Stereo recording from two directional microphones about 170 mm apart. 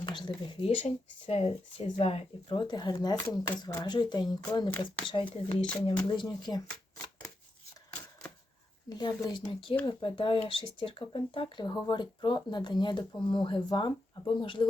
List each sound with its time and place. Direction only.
0.0 s speech: 25° left (ahead or behind)
8.9 s speech: 25° left (ahead or behind)